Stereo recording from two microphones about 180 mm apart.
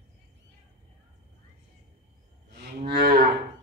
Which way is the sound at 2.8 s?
55° right (ahead or behind).